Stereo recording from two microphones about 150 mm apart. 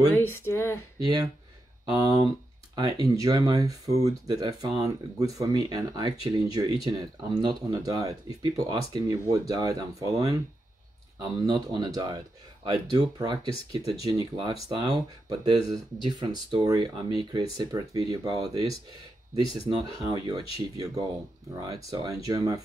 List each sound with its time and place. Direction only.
0.1 s speech: 15° left (ahead or behind)
0.9 s speech: 25° right (ahead or behind)